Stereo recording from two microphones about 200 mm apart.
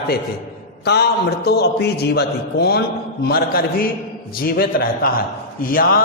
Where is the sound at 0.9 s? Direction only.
55° left (ahead or behind).